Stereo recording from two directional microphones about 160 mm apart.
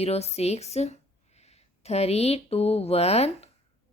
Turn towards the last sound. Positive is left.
turn(degrees=40)  # may be behind; listen again after turning